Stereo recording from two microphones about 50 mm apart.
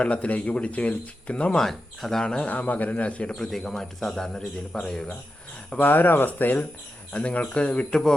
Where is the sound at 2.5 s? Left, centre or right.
Left.